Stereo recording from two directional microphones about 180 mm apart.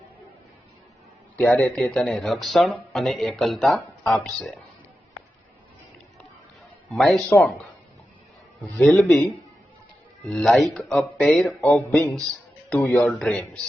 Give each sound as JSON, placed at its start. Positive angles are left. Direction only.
{"t": 1.4, "sound": "speech", "side_deg": 5}
{"t": 6.9, "sound": "speech", "side_deg": 0}
{"t": 8.5, "sound": "speech", "side_deg": 5}